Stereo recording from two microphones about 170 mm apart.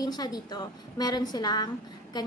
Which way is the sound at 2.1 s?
25° left (ahead or behind).